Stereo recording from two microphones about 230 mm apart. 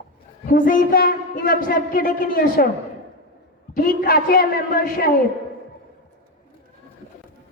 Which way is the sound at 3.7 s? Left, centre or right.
Left.